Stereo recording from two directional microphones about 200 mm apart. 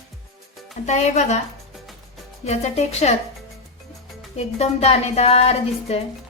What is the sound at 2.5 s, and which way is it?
Speech, 35° left (ahead or behind).